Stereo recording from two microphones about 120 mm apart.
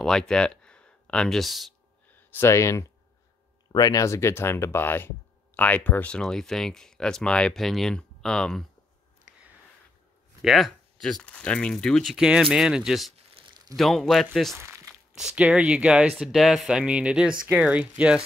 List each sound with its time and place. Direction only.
0.0 s speech: 5° left (ahead or behind)
2.1 s speech: 20° left (ahead or behind)
10.4 s speech: centre (ahead or behind)
13.4 s a sound: 50° right (ahead or behind)
13.7 s speech: centre (ahead or behind)
14.6 s a sound: 20° right (ahead or behind)
14.9 s speech: 5° right (ahead or behind)